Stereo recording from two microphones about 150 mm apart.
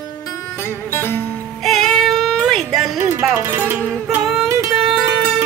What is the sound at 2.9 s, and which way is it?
Music, 15° right (ahead or behind).